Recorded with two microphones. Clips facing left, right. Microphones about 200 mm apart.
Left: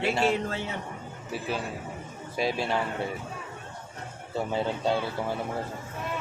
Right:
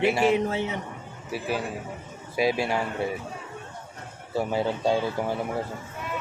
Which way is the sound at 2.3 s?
10° right (ahead or behind).